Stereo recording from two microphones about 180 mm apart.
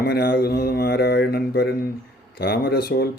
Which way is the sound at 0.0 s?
55° left (ahead or behind).